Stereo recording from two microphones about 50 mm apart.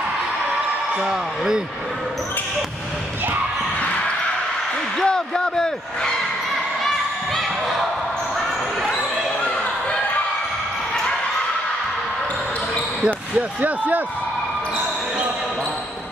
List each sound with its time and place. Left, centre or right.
1.0 s speech: centre
5.0 s speech: centre
7.3 s speech: centre
13.6 s speech: right